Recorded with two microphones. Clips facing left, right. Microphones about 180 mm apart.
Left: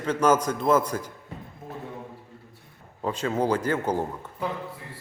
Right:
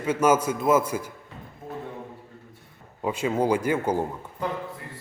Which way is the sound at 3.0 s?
10° right (ahead or behind).